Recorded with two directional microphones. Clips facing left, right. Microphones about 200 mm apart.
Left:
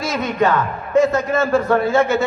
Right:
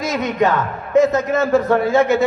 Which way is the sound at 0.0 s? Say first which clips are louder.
Right 1 dB; 15° right (ahead or behind).